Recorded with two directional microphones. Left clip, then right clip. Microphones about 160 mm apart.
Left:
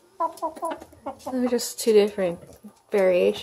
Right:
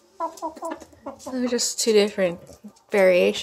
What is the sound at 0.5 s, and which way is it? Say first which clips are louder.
Speech: left 2 dB; 30° left (ahead or behind).